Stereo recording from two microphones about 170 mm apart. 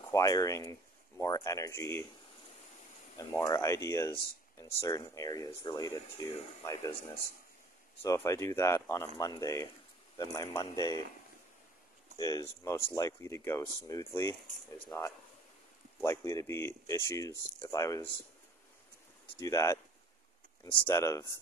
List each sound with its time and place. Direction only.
0.1 s speech: 20° left (ahead or behind)
3.2 s speech: 20° left (ahead or behind)
8.0 s speech: 15° left (ahead or behind)
12.2 s speech: 20° left (ahead or behind)
19.4 s speech: 20° left (ahead or behind)
20.9 s speech: 15° left (ahead or behind)